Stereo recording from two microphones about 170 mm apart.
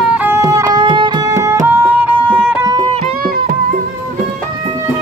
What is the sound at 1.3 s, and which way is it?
Music, 20° right (ahead or behind).